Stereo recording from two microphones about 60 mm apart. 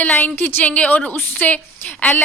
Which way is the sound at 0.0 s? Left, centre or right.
Left.